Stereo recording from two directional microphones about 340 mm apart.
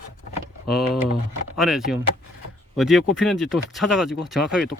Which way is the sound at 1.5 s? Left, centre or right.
Centre.